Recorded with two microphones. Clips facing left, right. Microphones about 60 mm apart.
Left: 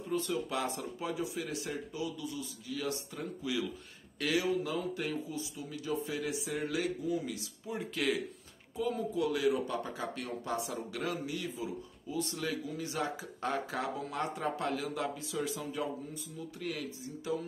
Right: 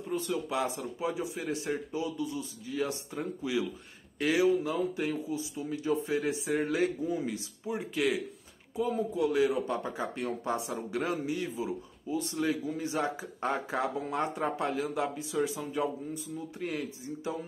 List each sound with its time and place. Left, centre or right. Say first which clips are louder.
0.1 s a man's voice: right 2 dB; centre